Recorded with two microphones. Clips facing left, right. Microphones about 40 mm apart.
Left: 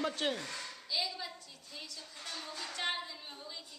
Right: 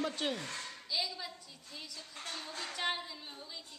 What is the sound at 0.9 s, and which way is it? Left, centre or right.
A woman's voice, centre.